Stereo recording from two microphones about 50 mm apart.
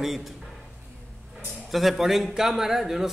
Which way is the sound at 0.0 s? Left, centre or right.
Centre.